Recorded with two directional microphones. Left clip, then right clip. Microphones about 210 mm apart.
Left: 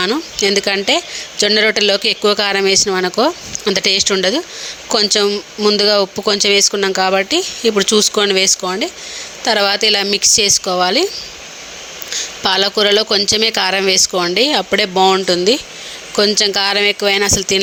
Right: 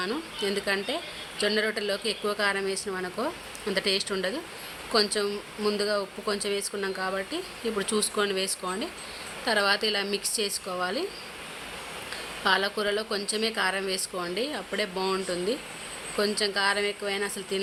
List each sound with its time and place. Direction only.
0.0 s speech: 35° left (ahead or behind)
12.4 s speech: 40° left (ahead or behind)